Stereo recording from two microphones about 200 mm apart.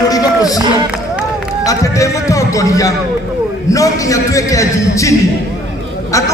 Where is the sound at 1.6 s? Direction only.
15° left (ahead or behind).